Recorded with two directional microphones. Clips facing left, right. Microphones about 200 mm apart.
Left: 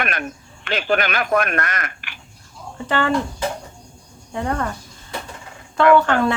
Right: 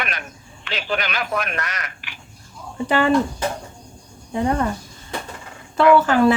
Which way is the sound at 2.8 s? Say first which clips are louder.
Right 2 dB; 10° right (ahead or behind).